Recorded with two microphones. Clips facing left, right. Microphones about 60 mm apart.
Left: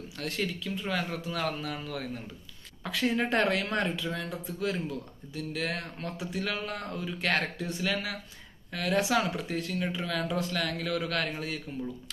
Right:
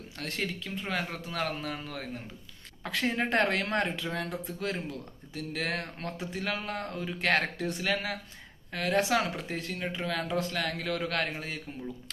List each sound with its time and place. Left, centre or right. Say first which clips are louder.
0.2 s speech: left 2 dB; right
7.9 s speech: right 1 dB; right